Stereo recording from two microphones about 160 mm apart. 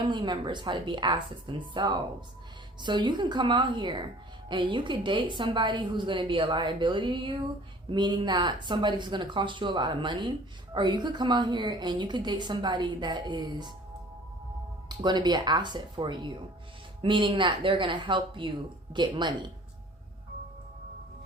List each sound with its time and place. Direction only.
0.0 s a woman's voice: 30° right (ahead or behind)
14.8 s a woman's voice: 25° right (ahead or behind)